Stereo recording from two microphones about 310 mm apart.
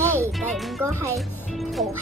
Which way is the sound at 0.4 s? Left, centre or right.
Centre.